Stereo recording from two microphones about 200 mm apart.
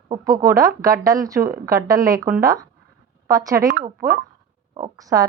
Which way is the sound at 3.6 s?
45° right (ahead or behind).